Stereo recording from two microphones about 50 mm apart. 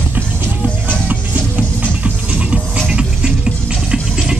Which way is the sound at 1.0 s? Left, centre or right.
Right.